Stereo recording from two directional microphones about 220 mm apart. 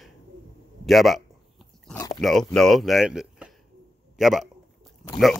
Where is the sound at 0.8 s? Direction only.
Centre (ahead or behind).